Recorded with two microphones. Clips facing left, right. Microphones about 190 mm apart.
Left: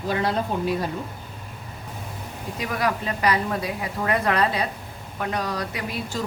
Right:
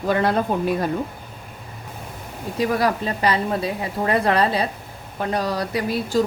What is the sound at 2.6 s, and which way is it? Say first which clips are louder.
A woman's voice: right 5 dB; 35° right (ahead or behind).